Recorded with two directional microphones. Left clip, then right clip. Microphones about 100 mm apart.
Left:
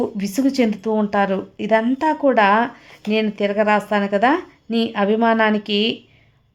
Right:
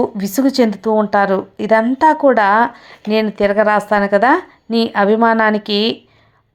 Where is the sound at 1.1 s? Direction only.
30° left (ahead or behind).